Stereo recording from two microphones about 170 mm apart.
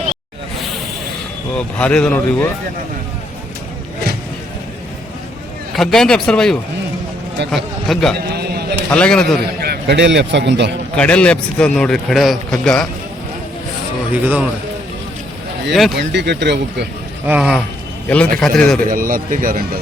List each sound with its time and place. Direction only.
1.5 s speech: 5° left (ahead or behind)
5.7 s a man's voice: centre (ahead or behind)
8.3 s a sound: 70° right (ahead or behind)
8.9 s a man's voice: 5° left (ahead or behind)
9.6 s a man's voice: 70° right (ahead or behind); by 10.7 s 90° right
10.9 s a man's voice: 5° left (ahead or behind)
14.1 s speech: 10° right (ahead or behind)
15.7 s a man's voice: centre (ahead or behind)
16.0 s speech: 85° right
17.2 s a man's voice: 5° right (ahead or behind)
18.9 s speech: 55° right (ahead or behind)